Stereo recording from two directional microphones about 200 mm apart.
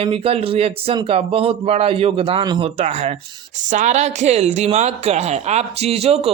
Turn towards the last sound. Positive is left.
turn(degrees=-30)  # may be behind; listen again after turning